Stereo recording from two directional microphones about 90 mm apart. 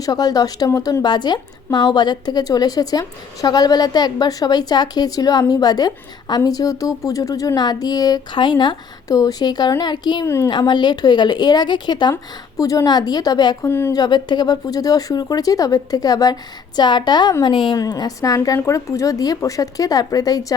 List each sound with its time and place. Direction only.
0.0 s a woman's voice: 45° left (ahead or behind)
8.3 s a woman's voice: 60° left (ahead or behind)
10.2 s speech: 30° left (ahead or behind)
10.5 s a woman's voice: 55° left (ahead or behind)
12.1 s a woman's voice: 40° left (ahead or behind)
13.6 s speech: 25° left (ahead or behind)
13.9 s a woman's voice: 50° left (ahead or behind)
17.4 s speech: 65° left (ahead or behind)
17.7 s a woman's voice: 50° left (ahead or behind)